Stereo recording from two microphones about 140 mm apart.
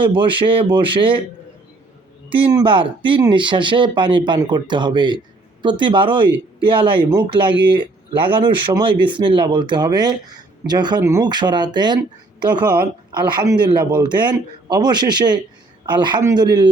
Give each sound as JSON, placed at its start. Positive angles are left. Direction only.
{"t": 0.0, "sound": "speech", "side_deg": -35}
{"t": 2.5, "sound": "speech", "side_deg": -30}
{"t": 13.1, "sound": "speech", "side_deg": -30}